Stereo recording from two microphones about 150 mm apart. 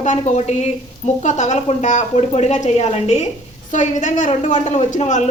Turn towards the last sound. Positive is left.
turn(degrees=50)  # may be behind; listen again after turning